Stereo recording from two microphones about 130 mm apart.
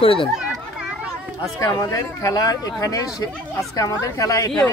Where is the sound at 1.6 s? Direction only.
25° left (ahead or behind).